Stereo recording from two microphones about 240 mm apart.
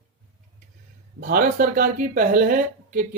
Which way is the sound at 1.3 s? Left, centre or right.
Right.